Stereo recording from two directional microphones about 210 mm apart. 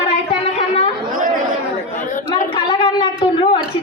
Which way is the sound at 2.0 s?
35° left (ahead or behind).